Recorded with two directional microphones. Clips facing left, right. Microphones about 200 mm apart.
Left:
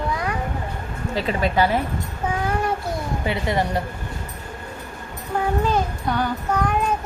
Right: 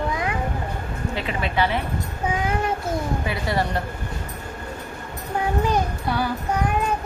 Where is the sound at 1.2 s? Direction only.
40° left (ahead or behind).